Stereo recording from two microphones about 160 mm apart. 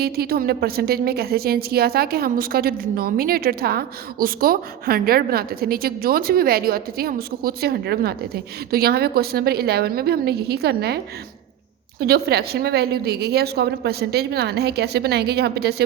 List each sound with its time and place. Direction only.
0.0 s a woman's voice: 70° right (ahead or behind); by 15.7 s 90° right